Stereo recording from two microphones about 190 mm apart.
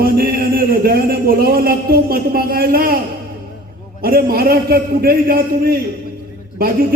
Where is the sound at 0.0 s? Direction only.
50° right (ahead or behind).